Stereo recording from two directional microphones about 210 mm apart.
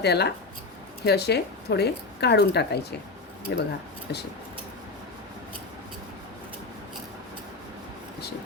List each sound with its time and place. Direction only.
0.0 s speech: 50° left (ahead or behind)